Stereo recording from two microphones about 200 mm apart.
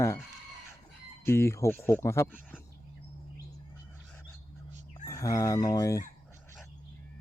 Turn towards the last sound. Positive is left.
turn(degrees=15)  # may be behind; listen again after turning